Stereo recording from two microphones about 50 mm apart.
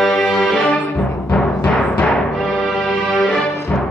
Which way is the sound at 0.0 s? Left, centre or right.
Centre.